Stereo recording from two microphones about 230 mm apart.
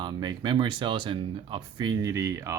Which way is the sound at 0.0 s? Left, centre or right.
Centre.